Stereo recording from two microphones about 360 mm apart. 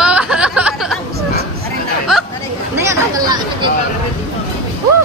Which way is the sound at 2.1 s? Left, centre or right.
Centre.